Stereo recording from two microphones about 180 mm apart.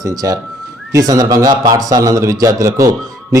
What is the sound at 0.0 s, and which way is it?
A man's voice, 20° right (ahead or behind).